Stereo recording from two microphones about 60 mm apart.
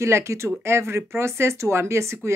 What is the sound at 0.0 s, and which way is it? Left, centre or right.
Speech, right.